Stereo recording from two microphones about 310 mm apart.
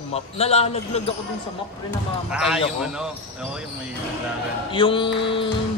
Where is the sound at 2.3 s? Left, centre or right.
Centre.